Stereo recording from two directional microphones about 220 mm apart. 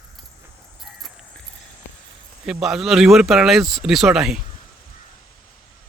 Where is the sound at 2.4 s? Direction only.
Centre (ahead or behind).